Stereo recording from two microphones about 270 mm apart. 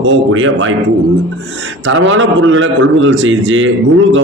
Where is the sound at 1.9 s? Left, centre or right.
Right.